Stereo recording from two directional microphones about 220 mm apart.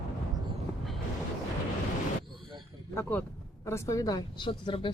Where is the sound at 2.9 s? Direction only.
10° left (ahead or behind).